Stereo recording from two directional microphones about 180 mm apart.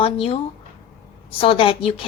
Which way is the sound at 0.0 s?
30° left (ahead or behind).